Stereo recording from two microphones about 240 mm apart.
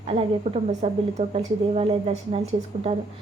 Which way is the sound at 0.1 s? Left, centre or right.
Right.